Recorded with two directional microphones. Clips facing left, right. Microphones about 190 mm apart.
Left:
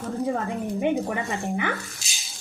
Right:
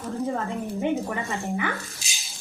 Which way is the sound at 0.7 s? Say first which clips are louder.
Left 2 dB; 15° left (ahead or behind).